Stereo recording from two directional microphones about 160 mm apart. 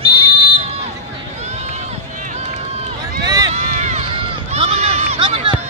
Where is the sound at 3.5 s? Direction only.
45° right (ahead or behind).